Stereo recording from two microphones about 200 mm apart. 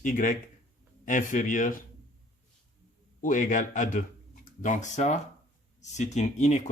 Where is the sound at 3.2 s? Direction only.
40° left (ahead or behind).